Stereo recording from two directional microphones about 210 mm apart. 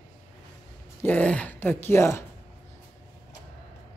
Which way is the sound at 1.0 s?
5° left (ahead or behind).